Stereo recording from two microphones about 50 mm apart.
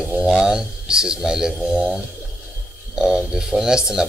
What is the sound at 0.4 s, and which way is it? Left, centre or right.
Speech, centre.